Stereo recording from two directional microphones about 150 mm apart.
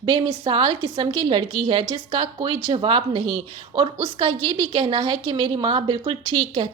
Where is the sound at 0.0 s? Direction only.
30° right (ahead or behind).